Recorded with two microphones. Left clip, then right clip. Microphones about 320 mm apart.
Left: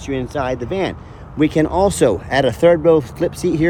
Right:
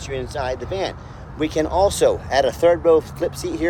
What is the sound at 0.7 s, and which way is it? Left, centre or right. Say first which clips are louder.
Speech: left 4 dB; left.